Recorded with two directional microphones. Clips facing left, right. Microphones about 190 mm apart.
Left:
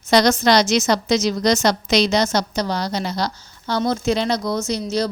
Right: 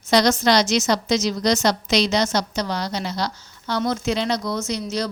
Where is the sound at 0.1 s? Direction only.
55° left (ahead or behind).